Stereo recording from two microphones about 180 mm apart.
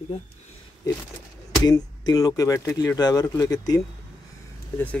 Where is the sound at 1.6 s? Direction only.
20° left (ahead or behind).